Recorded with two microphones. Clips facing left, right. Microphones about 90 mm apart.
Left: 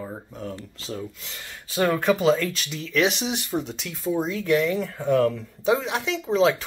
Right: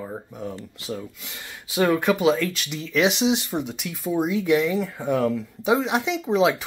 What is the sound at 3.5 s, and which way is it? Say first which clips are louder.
Speech: even; 10° right (ahead or behind).